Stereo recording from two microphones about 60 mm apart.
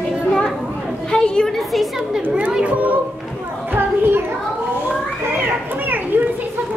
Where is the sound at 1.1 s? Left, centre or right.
Centre.